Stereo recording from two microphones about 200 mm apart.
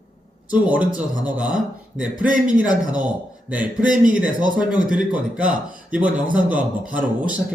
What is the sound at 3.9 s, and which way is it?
Speech, 40° right (ahead or behind).